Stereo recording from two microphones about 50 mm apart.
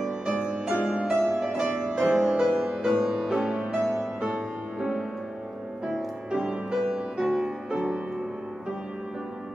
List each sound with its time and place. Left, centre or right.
0.0 s music: centre
1.1 s music: centre